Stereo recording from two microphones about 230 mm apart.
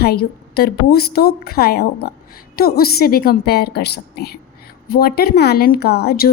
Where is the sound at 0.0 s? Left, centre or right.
Left.